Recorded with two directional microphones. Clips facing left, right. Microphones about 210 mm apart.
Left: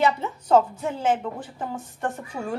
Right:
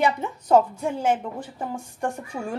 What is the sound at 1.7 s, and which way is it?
Speech, 10° right (ahead or behind).